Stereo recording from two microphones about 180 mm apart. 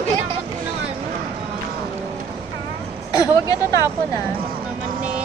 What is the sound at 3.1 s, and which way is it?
Speech, 20° left (ahead or behind).